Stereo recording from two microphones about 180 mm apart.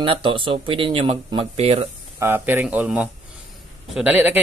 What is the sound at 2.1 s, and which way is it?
A man's voice, 10° right (ahead or behind).